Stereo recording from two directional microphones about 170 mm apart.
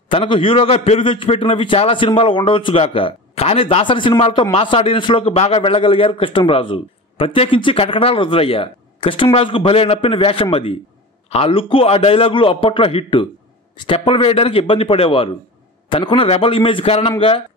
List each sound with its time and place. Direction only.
0.1 s a man's voice: 30° left (ahead or behind)